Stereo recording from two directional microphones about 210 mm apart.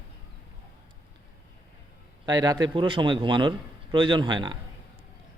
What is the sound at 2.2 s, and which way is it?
A man's voice, 20° right (ahead or behind).